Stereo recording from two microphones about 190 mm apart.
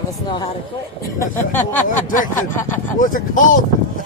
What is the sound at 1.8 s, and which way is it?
Speech, 45° left (ahead or behind).